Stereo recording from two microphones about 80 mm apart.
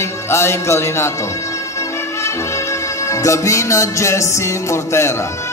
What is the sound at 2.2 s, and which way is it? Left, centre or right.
Music, left.